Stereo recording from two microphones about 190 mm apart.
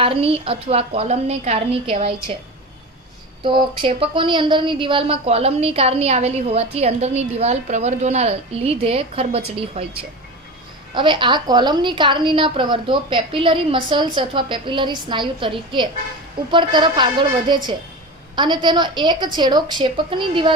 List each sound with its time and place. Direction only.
0.0 s a woman's voice: 30° right (ahead or behind)
3.4 s a woman's voice: 25° right (ahead or behind)